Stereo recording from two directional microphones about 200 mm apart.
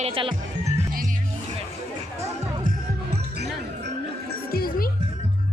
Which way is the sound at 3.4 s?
55° right (ahead or behind).